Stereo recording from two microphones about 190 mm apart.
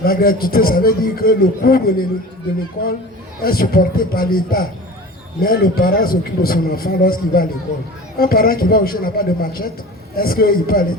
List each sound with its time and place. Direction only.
0.0 s a man's voice: 50° left (ahead or behind)
3.4 s a man's voice: 50° left (ahead or behind)